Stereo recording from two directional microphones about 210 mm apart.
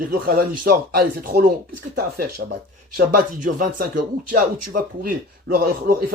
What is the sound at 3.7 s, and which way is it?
Speech, 40° right (ahead or behind).